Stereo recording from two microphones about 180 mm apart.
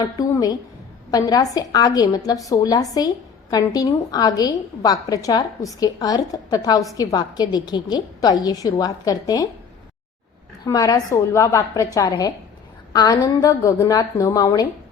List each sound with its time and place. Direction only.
0.2 s a woman's voice: 20° left (ahead or behind)
10.7 s a woman's voice: 20° left (ahead or behind)